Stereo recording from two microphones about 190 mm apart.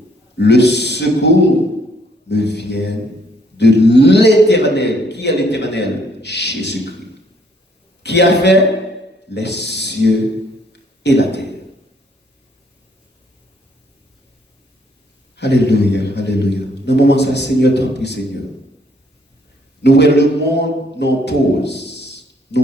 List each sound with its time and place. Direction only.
0.3 s a man's voice: 65° left (ahead or behind)
2.3 s a man's voice: 65° left (ahead or behind)
8.0 s a man's voice: 65° left (ahead or behind)
10.7 s a sound: 65° left (ahead or behind)
15.4 s a man's voice: 65° left (ahead or behind)
19.8 s a man's voice: 65° left (ahead or behind)